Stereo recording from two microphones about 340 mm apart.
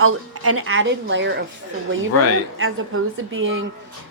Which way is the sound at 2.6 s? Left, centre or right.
Right.